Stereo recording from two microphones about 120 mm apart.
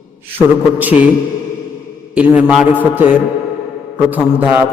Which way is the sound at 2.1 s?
10° right (ahead or behind).